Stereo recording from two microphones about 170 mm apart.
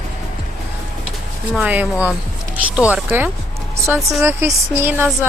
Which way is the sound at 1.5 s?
10° right (ahead or behind).